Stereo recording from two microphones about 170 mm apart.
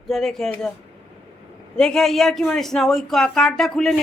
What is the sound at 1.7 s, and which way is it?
Speech, 5° left (ahead or behind).